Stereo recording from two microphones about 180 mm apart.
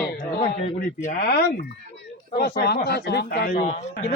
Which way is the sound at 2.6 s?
65° left (ahead or behind).